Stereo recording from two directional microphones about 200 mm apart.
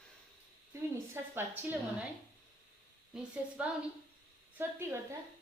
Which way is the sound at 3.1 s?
5° right (ahead or behind).